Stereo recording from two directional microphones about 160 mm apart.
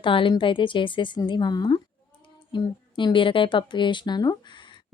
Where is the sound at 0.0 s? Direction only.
30° left (ahead or behind).